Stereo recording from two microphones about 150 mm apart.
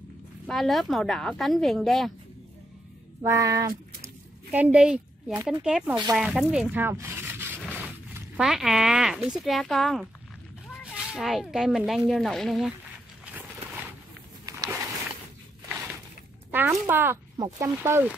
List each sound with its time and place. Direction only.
0.5 s a woman's voice: centre (ahead or behind)
3.2 s speech: 25° right (ahead or behind)
4.5 s speech: 10° right (ahead or behind)
13.2 s a sound: 10° right (ahead or behind)
16.5 s speech: 15° right (ahead or behind)